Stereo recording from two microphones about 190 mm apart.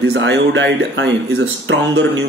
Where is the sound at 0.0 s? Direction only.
65° right (ahead or behind).